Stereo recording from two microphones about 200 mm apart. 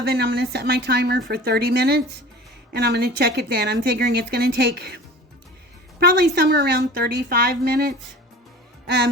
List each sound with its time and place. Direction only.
0.0 s speech: 55° right (ahead or behind)
6.0 s speech: 50° right (ahead or behind)